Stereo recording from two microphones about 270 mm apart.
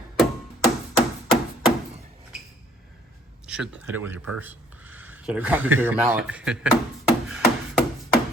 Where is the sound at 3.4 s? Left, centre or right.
Centre.